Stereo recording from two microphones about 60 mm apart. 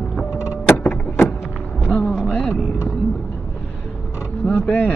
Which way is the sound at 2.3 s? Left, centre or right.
Centre.